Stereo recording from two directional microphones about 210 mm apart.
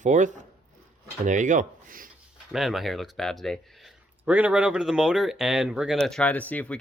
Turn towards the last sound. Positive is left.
turn(degrees=5)  # may be behind; listen again after turning